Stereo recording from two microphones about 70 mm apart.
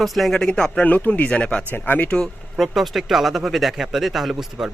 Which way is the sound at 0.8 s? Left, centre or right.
Left.